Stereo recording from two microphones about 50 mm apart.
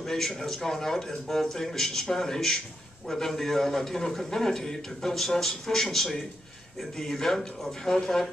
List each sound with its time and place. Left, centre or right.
0.0 s a man's voice: centre